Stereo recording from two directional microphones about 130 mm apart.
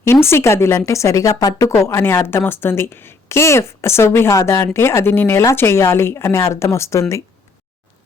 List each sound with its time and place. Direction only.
0.0 s speech: 20° left (ahead or behind)